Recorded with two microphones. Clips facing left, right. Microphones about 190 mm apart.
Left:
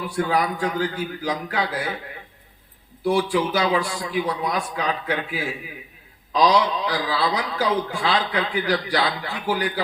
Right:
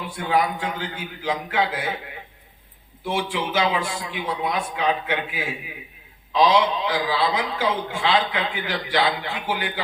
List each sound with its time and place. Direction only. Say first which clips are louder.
0.2 s a man's voice: left 1 dB; 40° left (ahead or behind)
3.0 s a man's voice: left 5 dB; 40° left (ahead or behind)